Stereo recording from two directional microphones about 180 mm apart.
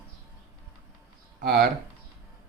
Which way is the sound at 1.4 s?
65° right (ahead or behind).